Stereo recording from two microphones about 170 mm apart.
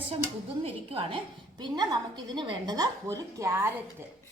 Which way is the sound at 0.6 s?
35° right (ahead or behind).